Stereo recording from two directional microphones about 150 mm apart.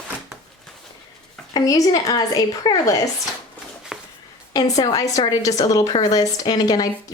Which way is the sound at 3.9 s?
5° right (ahead or behind).